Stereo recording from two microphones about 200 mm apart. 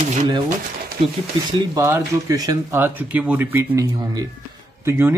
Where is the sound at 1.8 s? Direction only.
15° right (ahead or behind).